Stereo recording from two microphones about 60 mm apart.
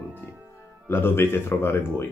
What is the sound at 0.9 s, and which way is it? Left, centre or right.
Speech, left.